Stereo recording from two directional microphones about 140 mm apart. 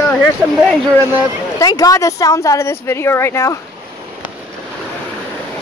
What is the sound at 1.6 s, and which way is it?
Speech, 25° left (ahead or behind).